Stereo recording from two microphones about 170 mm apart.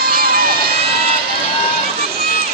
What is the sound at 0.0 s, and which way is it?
Vehicle, 60° right (ahead or behind).